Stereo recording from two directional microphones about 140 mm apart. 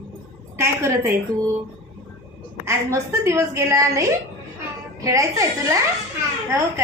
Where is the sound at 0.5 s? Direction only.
20° right (ahead or behind).